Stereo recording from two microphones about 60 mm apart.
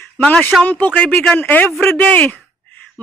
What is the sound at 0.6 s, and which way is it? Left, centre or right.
A man's voice, left.